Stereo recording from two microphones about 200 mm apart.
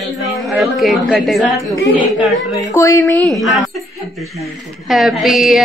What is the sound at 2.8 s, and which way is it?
Speech, 15° left (ahead or behind).